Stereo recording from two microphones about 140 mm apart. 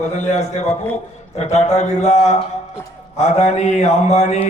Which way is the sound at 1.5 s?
55° left (ahead or behind).